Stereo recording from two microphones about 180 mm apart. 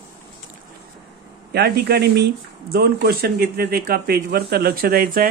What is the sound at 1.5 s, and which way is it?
Speech, 65° right (ahead or behind).